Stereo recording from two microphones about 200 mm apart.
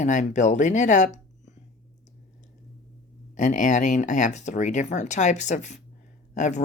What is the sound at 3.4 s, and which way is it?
Speech, 40° left (ahead or behind).